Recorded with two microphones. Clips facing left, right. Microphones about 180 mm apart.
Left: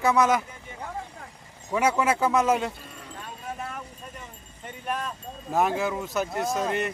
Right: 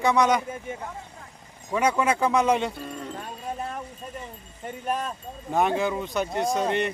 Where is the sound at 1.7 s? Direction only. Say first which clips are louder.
Even; 5° left (ahead or behind).